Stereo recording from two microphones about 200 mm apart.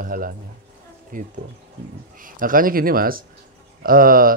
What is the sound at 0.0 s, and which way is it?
Music, 45° right (ahead or behind).